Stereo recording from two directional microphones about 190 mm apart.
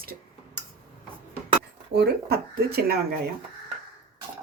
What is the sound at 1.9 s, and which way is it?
Speech, 55° right (ahead or behind).